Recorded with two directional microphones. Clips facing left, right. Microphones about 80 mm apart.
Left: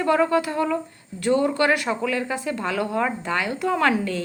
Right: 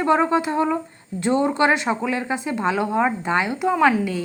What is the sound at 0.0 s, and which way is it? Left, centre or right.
A woman's voice, right.